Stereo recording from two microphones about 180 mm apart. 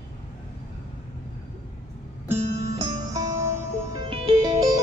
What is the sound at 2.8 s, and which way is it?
Music, 15° right (ahead or behind).